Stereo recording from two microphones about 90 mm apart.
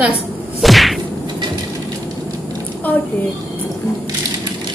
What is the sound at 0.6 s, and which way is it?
Whip, centre (ahead or behind).